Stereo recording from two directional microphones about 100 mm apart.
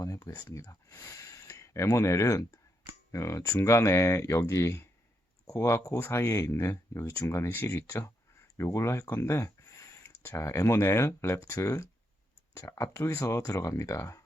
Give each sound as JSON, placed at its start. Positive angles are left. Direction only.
{"t": 0.0, "sound": "speech", "side_deg": 35}